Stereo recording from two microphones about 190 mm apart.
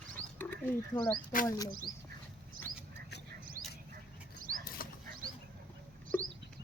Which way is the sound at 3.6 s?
15° right (ahead or behind).